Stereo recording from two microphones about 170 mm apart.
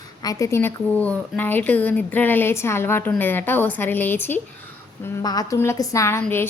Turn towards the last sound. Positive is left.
turn(degrees=15)  # may be behind; listen again after turning